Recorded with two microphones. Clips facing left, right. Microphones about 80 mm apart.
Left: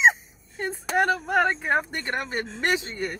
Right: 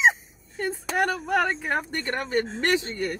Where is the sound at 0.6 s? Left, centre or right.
Left.